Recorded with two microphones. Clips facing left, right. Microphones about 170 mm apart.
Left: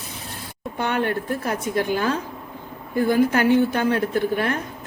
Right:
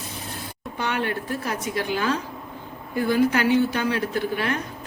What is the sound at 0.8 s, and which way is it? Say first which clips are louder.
A woman's voice: left 3 dB; 50° left (ahead or behind).